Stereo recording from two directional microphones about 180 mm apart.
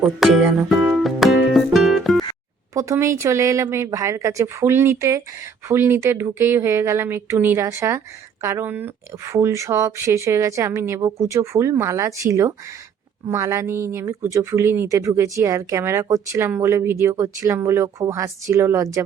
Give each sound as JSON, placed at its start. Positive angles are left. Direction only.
{"t": 0.0, "sound": "music", "side_deg": 0}
{"t": 2.7, "sound": "speech", "side_deg": -15}